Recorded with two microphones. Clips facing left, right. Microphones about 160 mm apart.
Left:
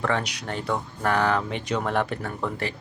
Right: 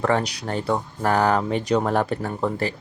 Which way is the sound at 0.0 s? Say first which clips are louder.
Right 5 dB; 35° right (ahead or behind).